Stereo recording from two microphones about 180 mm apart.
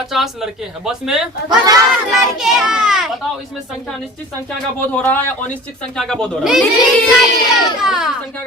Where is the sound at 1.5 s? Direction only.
20° right (ahead or behind).